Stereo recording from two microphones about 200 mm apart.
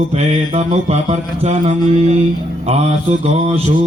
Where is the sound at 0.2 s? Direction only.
30° right (ahead or behind).